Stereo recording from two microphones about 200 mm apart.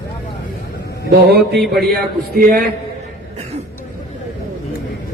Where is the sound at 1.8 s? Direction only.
50° right (ahead or behind).